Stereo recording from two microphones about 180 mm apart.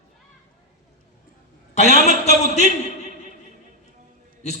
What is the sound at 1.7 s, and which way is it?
Music, 40° left (ahead or behind).